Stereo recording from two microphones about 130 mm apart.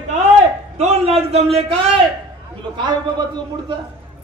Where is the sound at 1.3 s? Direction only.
55° right (ahead or behind).